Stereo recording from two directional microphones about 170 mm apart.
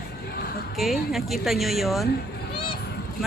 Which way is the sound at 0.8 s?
Centre (ahead or behind).